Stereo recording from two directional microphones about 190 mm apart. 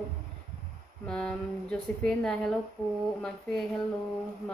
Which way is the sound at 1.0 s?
5° left (ahead or behind).